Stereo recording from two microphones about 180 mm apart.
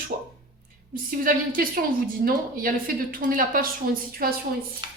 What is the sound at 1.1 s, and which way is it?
A woman's voice, 50° right (ahead or behind).